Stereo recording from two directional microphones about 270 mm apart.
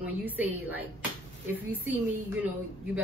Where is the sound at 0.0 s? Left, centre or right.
Centre.